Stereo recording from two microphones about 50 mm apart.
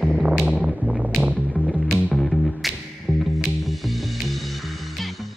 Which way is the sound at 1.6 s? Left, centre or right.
Left.